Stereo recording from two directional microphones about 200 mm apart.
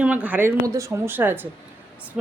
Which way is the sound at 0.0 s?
5° right (ahead or behind).